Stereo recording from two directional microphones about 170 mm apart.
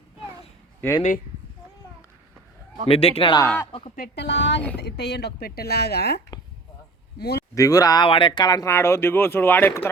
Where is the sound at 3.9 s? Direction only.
70° left (ahead or behind).